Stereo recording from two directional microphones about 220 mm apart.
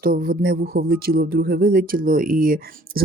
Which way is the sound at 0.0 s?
40° right (ahead or behind).